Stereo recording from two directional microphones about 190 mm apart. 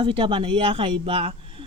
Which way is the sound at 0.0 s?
25° right (ahead or behind).